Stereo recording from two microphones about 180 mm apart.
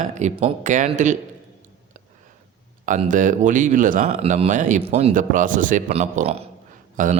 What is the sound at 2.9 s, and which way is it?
Speech, 45° right (ahead or behind).